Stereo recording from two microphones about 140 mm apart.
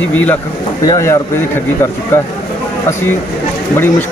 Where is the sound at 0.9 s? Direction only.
20° left (ahead or behind).